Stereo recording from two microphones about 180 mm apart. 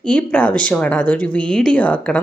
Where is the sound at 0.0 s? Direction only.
5° left (ahead or behind).